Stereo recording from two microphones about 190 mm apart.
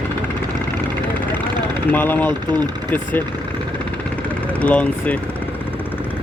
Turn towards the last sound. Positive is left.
turn(degrees=5)  # may be behind; listen again after turning